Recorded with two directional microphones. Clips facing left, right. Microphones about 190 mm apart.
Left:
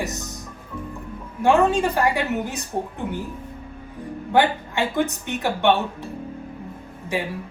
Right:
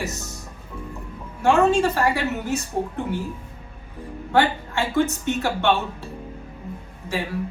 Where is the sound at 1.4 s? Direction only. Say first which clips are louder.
Even; 15° left (ahead or behind).